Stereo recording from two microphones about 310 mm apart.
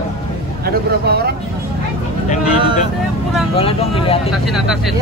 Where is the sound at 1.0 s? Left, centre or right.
Right.